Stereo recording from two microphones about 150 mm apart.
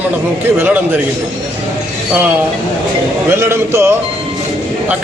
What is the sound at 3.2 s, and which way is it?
Speech, 15° right (ahead or behind).